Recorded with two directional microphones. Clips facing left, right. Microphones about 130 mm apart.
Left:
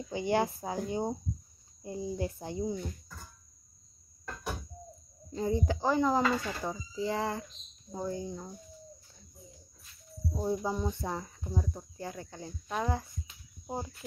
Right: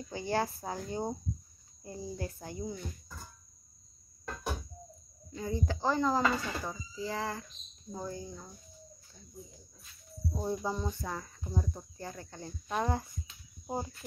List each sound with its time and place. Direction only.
0.1 s speech: 20° left (ahead or behind)
5.3 s speech: 25° left (ahead or behind)
10.3 s speech: 10° left (ahead or behind)
11.4 s speech: 5° left (ahead or behind)
12.0 s speech: 15° left (ahead or behind)
12.7 s speech: 5° right (ahead or behind)